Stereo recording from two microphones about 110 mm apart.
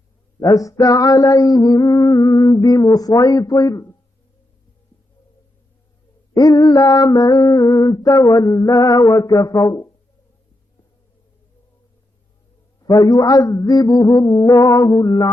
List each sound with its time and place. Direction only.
0.3 s male singing: 30° left (ahead or behind)
6.3 s male singing: 35° left (ahead or behind)
12.8 s male singing: 30° left (ahead or behind)